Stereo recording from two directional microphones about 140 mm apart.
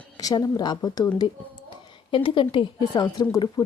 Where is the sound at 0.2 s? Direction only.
25° left (ahead or behind).